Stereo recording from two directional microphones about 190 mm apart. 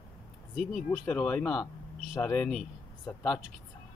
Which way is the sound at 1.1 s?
5° left (ahead or behind).